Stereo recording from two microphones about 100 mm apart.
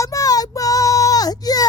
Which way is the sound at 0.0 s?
35° left (ahead or behind).